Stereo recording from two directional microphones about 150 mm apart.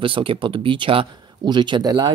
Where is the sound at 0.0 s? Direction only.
35° right (ahead or behind).